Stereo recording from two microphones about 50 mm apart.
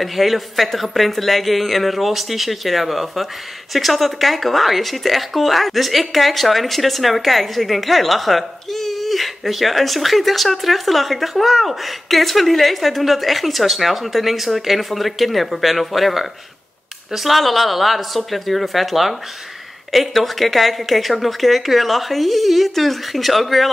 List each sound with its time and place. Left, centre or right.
0.0 s speech: centre